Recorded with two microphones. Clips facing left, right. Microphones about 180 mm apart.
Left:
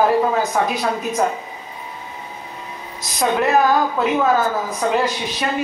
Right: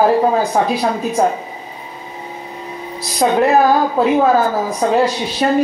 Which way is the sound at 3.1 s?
30° right (ahead or behind).